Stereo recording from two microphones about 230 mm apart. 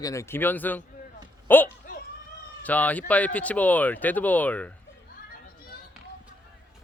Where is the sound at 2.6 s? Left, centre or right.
Centre.